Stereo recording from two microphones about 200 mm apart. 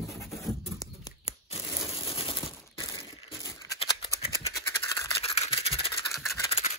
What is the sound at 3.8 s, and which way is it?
Scissors, 30° left (ahead or behind).